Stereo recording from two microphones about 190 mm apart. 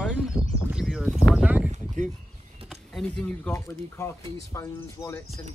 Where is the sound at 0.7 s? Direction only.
Centre (ahead or behind).